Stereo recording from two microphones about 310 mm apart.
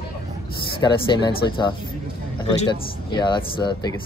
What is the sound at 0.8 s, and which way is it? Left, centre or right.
Speech, centre.